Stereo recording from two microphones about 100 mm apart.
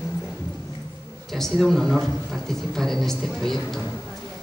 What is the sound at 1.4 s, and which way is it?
A woman's voice, 5° left (ahead or behind).